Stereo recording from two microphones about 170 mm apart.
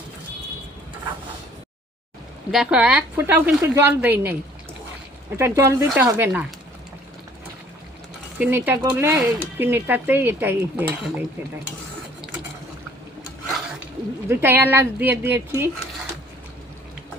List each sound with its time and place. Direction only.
2.5 s speech: 5° right (ahead or behind)
5.4 s speech: 15° right (ahead or behind)
8.4 s speech: 10° right (ahead or behind)
14.3 s speech: 10° right (ahead or behind)